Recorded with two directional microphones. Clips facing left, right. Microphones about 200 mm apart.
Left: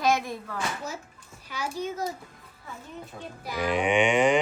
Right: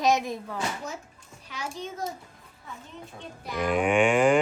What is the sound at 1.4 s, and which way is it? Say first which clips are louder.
Speech: left 4 dB; centre (ahead or behind).